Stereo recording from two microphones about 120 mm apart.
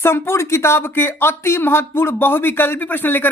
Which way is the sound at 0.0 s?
20° left (ahead or behind).